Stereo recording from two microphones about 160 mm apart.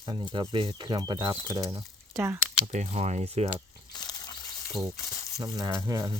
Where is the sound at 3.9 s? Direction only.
25° left (ahead or behind).